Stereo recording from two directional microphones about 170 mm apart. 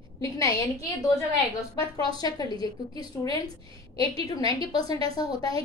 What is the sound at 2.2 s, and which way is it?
Speech, 25° left (ahead or behind).